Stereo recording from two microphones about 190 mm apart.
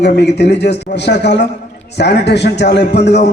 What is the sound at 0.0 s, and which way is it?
A man's voice, 60° left (ahead or behind).